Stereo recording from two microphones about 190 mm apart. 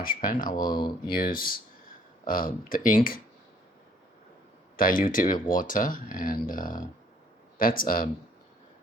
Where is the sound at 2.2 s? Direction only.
45° left (ahead or behind).